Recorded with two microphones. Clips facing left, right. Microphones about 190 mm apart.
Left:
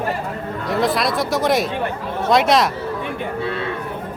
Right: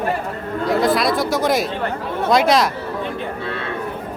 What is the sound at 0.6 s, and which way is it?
Speech, centre (ahead or behind).